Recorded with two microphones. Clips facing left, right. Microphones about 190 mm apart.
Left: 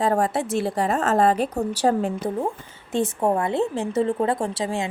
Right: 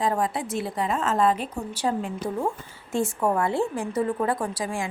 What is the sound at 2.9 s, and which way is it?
A woman's voice, 20° left (ahead or behind).